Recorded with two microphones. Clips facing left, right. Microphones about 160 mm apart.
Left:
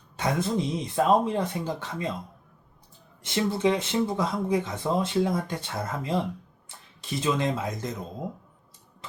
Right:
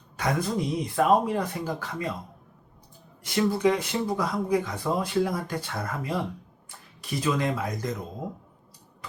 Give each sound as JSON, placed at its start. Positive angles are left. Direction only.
{"t": 0.2, "sound": "speech", "side_deg": 25}
{"t": 3.2, "sound": "speech", "side_deg": 25}